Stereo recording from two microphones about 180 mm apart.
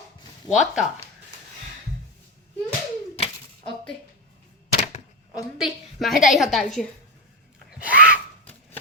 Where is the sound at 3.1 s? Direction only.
35° left (ahead or behind).